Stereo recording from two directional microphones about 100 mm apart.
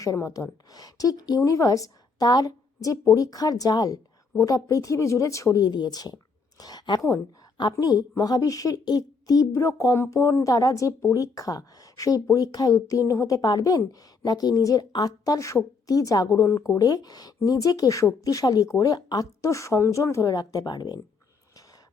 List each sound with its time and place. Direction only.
0.0 s a woman's voice: 30° left (ahead or behind)